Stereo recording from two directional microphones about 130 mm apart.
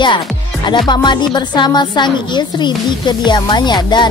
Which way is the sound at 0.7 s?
35° left (ahead or behind).